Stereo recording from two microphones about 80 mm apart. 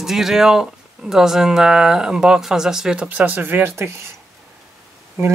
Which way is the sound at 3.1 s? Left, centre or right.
Right.